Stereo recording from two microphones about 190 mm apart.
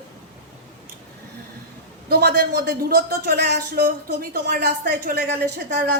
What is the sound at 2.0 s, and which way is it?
A woman's voice, 55° right (ahead or behind).